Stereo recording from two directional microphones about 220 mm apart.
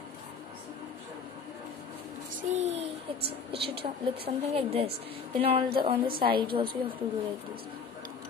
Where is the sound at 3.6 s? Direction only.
25° right (ahead or behind).